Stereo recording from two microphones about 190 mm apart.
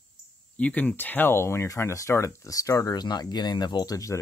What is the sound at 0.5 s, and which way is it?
Speech, 10° left (ahead or behind).